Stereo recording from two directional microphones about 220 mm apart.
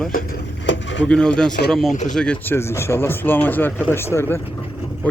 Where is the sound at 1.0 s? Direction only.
5° left (ahead or behind).